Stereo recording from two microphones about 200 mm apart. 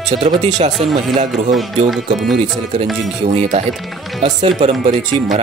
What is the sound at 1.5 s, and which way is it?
Speech, centre (ahead or behind).